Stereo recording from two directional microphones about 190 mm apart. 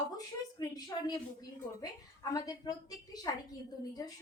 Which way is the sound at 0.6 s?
20° left (ahead or behind).